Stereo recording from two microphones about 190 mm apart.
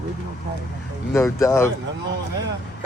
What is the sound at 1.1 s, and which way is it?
Speech, 15° left (ahead or behind).